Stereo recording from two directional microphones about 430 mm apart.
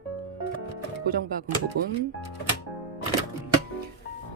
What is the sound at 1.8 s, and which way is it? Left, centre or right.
Speech, right.